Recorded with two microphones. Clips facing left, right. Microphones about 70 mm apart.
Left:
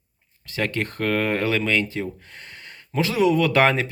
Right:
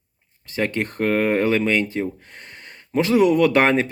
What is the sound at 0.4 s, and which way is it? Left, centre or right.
Speech, right.